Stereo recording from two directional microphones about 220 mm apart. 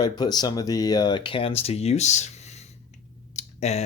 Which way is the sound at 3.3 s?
30° left (ahead or behind).